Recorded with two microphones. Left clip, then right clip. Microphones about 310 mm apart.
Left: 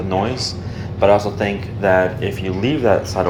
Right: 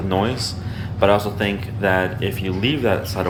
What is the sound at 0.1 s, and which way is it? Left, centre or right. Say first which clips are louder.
Speech: left 1 dB; centre.